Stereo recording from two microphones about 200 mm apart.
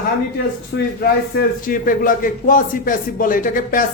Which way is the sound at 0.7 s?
55° left (ahead or behind).